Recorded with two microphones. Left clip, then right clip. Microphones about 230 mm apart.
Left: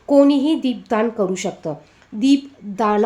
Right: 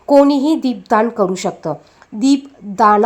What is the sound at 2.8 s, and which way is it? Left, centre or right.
Speech, centre.